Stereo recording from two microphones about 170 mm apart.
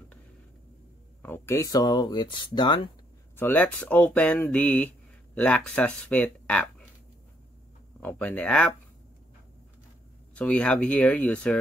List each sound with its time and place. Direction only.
1.2 s speech: 15° left (ahead or behind)
3.3 s speech: 10° left (ahead or behind)
8.0 s speech: 10° left (ahead or behind)
10.3 s speech: 5° left (ahead or behind)